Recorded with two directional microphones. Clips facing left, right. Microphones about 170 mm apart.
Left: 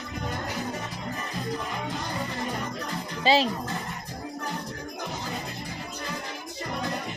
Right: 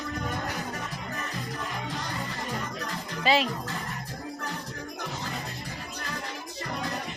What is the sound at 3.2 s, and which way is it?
Speech, 30° left (ahead or behind).